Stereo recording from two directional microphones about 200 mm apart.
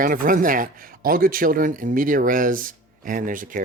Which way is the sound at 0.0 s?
45° right (ahead or behind).